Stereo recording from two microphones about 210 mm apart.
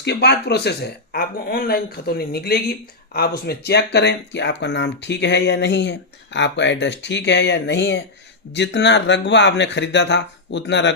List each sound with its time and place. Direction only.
0.0 s speech: 50° left (ahead or behind)